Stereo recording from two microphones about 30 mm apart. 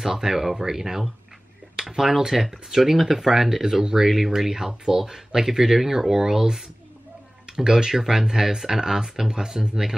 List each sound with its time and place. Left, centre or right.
0.1 s speech: centre